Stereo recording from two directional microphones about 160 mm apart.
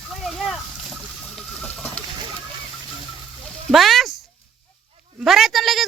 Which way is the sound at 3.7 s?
Centre (ahead or behind).